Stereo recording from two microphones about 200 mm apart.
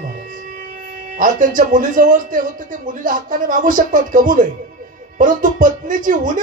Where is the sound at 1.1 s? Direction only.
40° right (ahead or behind).